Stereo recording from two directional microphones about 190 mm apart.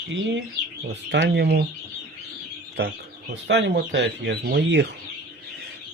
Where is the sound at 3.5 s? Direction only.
65° right (ahead or behind).